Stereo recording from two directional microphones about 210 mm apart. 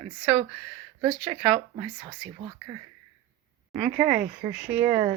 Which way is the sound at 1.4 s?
20° right (ahead or behind).